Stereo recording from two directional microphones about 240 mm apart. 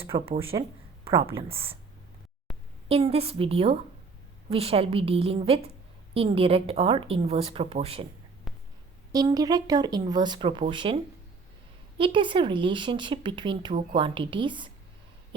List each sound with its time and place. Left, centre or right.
0.0 s speech: right
2.5 s a sound: centre
2.9 s speech: right
8.5 s a sound: centre
9.1 s speech: centre
11.9 s speech: right